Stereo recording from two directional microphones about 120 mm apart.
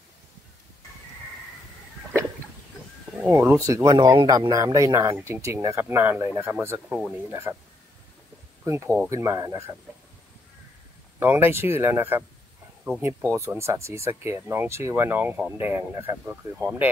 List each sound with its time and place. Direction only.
3.3 s speech: 20° right (ahead or behind)
6.9 s speech: 5° right (ahead or behind)
7.2 s speech: 25° right (ahead or behind)
8.6 s speech: 25° right (ahead or behind)
11.1 s speech: 20° right (ahead or behind)